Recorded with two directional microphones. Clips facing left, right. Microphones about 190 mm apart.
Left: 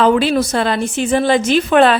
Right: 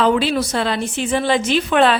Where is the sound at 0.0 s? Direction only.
50° left (ahead or behind).